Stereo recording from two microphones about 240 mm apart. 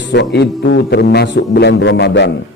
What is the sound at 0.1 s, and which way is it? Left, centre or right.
A man's voice, left.